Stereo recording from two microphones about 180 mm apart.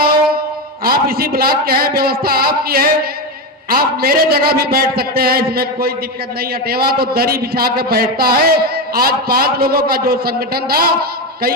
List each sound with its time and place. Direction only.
0.9 s a man's voice: 55° right (ahead or behind)